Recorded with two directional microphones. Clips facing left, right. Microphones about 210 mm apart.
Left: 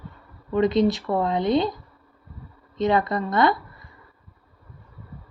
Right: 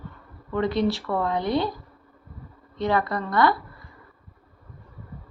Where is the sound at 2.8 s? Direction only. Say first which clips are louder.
Left 3 dB; 20° left (ahead or behind).